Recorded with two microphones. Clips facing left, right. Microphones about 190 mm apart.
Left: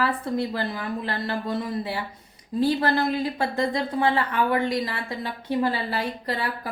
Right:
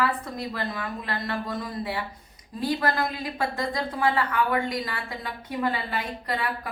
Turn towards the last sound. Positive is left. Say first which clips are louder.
# left 1 dB
turn(degrees=30)  # may be behind; listen again after turning